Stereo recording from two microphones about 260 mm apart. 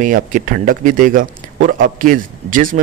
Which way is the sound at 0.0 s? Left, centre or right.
Right.